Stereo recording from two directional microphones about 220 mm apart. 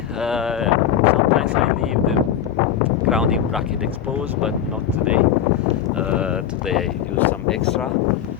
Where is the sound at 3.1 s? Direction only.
5° right (ahead or behind).